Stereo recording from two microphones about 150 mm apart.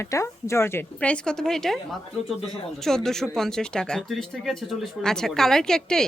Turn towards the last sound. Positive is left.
turn(degrees=5)  # may be behind; listen again after turning